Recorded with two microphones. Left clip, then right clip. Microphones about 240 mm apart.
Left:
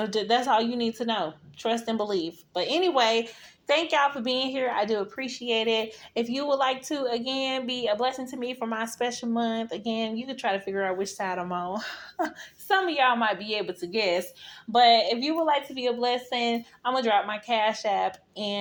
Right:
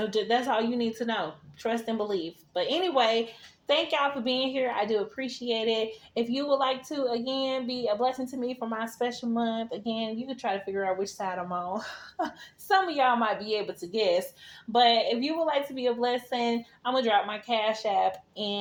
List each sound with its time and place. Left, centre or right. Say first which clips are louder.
0.2 s a woman's voice: left 3 dB; left